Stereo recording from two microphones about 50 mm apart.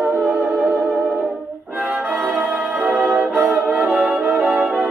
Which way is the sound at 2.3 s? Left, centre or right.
Right.